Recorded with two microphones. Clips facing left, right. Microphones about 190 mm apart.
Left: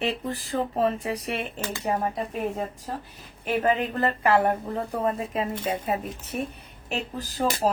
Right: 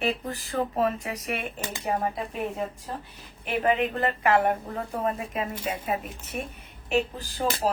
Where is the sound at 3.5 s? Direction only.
40° left (ahead or behind).